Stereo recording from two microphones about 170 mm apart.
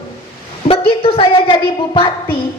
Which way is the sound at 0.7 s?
35° left (ahead or behind).